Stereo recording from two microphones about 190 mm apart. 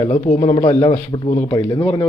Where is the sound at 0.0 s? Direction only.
40° left (ahead or behind).